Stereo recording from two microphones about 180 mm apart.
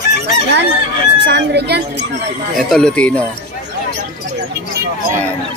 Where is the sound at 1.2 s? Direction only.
65° right (ahead or behind).